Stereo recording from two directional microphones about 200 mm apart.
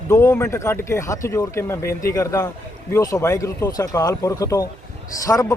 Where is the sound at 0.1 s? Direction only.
15° left (ahead or behind).